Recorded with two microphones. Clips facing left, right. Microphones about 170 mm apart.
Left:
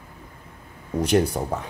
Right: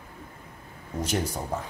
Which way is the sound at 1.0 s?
65° left (ahead or behind).